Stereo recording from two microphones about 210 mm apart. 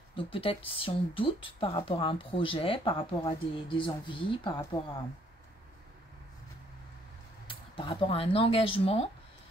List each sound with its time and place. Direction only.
0.1 s speech: 25° left (ahead or behind)
7.4 s speech: 25° left (ahead or behind)